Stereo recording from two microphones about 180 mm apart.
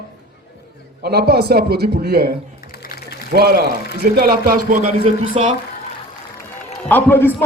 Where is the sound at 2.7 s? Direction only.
55° left (ahead or behind).